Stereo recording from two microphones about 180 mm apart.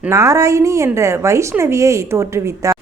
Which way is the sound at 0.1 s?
15° right (ahead or behind).